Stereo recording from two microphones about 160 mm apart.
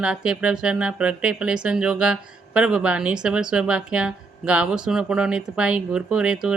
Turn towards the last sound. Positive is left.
turn(degrees=-5)  # may be behind; listen again after turning